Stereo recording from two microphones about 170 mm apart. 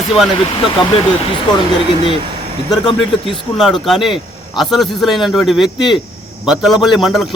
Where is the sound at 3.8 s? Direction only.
Centre (ahead or behind).